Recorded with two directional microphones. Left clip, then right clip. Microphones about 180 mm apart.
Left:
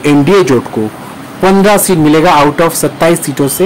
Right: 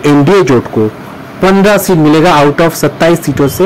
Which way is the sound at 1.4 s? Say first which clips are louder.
Even; 10° right (ahead or behind).